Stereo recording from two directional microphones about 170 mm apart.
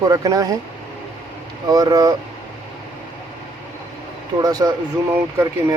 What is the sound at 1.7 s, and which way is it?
Speech, 20° right (ahead or behind).